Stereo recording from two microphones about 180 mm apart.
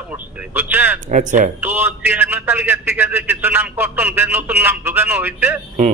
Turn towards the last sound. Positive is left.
turn(degrees=-10)  # may be behind; listen again after turning